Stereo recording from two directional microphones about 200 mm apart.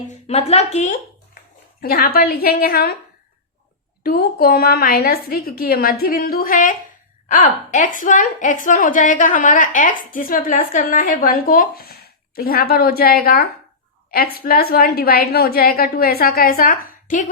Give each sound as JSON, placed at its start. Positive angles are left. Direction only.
{"t": 0.3, "sound": "speech", "side_deg": 30}
{"t": 1.8, "sound": "a woman's voice", "side_deg": 50}
{"t": 4.0, "sound": "a woman's voice", "side_deg": 50}